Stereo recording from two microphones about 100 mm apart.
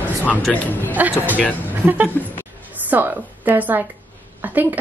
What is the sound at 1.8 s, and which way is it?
A woman's voice, 20° right (ahead or behind).